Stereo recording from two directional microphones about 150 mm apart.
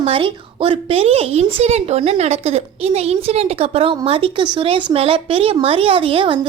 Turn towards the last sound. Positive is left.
turn(degrees=-35)  # may be behind; listen again after turning